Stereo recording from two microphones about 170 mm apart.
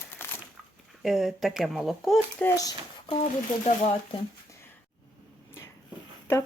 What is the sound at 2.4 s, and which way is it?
Speech, 20° left (ahead or behind).